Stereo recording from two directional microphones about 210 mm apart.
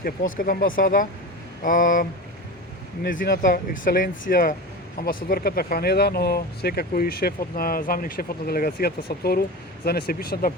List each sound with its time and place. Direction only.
0.3 s speech: 40° left (ahead or behind)